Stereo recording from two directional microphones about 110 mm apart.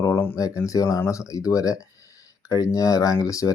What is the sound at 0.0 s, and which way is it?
Speech, 25° left (ahead or behind).